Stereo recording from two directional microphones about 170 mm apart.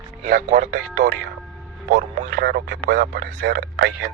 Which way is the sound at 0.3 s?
50° right (ahead or behind).